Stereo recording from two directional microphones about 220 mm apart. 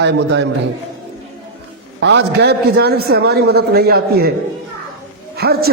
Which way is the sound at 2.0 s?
50° right (ahead or behind).